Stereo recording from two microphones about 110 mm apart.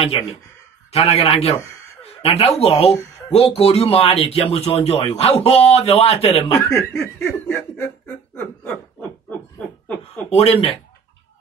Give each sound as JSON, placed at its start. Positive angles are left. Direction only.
{"t": 0.0, "sound": "a man's voice", "side_deg": 60}
{"t": 6.7, "sound": "snicker", "side_deg": 25}
{"t": 10.3, "sound": "speech", "side_deg": 65}